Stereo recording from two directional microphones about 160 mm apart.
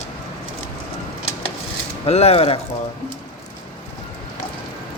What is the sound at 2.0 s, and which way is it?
Speech, 40° left (ahead or behind).